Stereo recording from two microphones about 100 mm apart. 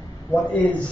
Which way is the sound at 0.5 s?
15° left (ahead or behind).